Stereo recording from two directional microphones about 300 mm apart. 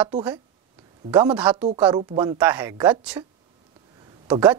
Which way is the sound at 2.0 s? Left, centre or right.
Centre.